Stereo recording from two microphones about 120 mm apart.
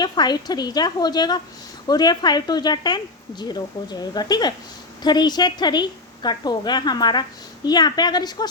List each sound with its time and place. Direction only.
0.0 s a woman's voice: 35° left (ahead or behind)